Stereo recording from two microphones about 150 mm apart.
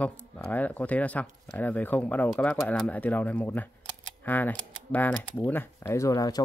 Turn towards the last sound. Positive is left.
turn(degrees=25)  # may be behind; listen again after turning